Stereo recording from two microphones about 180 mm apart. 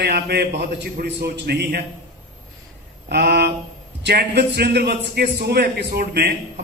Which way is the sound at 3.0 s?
65° right (ahead or behind).